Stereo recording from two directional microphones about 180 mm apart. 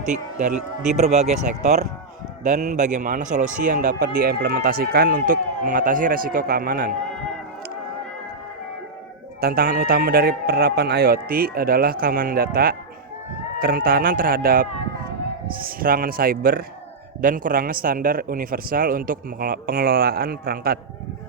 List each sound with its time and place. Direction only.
0.9 s a man's voice: 40° right (ahead or behind); by 6.9 s 55° right (ahead or behind)
9.4 s a man's voice: 55° right (ahead or behind)